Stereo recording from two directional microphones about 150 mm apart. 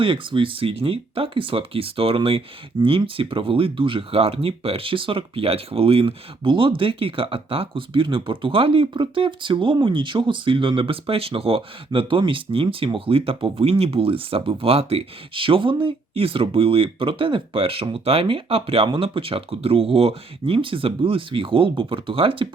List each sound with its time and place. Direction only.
0.0 s speech: 35° right (ahead or behind)